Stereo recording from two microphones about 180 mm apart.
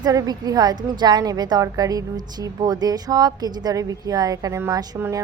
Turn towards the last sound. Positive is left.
turn(degrees=-15)  # may be behind; listen again after turning